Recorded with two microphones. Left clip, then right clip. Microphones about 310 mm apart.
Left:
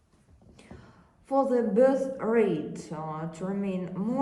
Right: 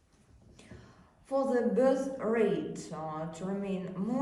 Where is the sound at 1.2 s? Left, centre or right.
Centre.